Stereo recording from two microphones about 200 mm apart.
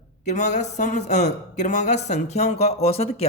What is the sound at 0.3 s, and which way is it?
A man's voice, 35° left (ahead or behind).